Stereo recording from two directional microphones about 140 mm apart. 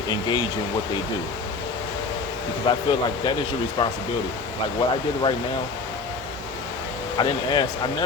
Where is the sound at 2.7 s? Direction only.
35° left (ahead or behind).